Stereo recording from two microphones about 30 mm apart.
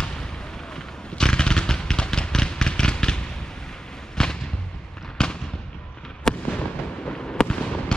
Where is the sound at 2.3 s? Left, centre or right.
Left.